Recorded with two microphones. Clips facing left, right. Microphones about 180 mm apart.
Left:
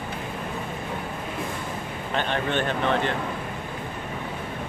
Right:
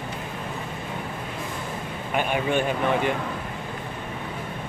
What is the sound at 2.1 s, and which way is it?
Speech, 10° right (ahead or behind).